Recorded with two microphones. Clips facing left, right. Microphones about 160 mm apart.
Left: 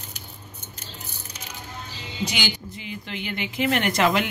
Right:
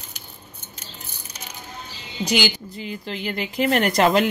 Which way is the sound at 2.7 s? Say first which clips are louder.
Right 4 dB; 35° right (ahead or behind).